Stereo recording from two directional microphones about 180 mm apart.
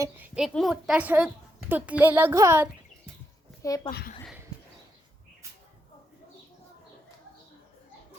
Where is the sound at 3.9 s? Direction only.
60° left (ahead or behind).